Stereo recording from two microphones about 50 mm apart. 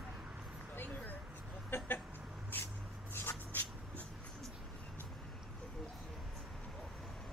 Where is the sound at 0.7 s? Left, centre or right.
Left.